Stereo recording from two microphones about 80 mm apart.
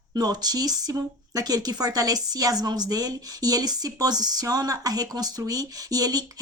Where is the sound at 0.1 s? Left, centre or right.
Right.